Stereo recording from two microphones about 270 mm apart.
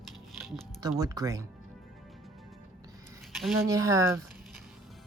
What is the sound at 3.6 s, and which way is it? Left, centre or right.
Speech, centre.